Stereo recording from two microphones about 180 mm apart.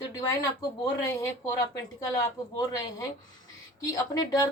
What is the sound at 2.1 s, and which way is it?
A woman's voice, 20° left (ahead or behind).